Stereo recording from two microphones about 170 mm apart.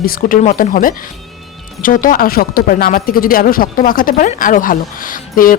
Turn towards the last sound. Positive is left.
turn(degrees=55)  # may be behind; listen again after turning